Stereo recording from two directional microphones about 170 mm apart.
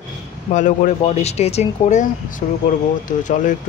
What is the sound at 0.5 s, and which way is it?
Speech, 45° left (ahead or behind).